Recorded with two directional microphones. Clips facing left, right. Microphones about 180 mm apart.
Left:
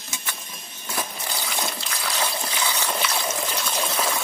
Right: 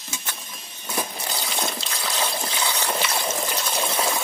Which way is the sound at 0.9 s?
20° right (ahead or behind).